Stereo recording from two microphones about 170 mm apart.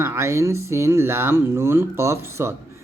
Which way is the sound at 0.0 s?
15° right (ahead or behind).